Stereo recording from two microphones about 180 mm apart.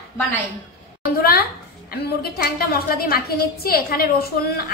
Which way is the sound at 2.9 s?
55° left (ahead or behind).